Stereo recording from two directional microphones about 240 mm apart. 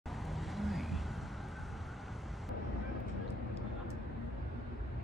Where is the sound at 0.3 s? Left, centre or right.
Centre.